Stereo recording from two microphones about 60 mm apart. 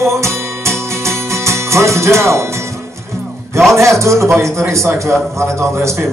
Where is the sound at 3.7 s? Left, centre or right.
Right.